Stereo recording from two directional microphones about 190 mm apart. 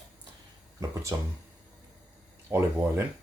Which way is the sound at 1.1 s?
15° right (ahead or behind).